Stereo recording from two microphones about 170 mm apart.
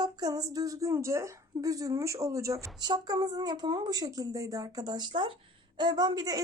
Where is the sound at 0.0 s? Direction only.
20° right (ahead or behind).